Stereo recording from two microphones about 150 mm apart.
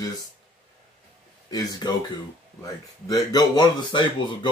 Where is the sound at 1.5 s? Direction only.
25° left (ahead or behind).